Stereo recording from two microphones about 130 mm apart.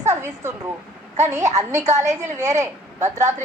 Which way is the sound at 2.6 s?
20° right (ahead or behind).